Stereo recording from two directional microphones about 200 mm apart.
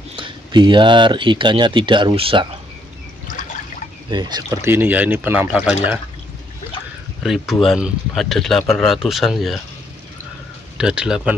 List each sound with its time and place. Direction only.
0.1 s speech: 25° right (ahead or behind)
4.1 s speech: 20° right (ahead or behind)
7.2 s speech: centre (ahead or behind)
10.8 s speech: 5° right (ahead or behind)